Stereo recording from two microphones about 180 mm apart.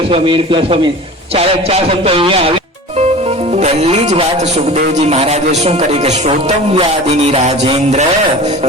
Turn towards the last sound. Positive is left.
turn(degrees=-35)  # may be behind; listen again after turning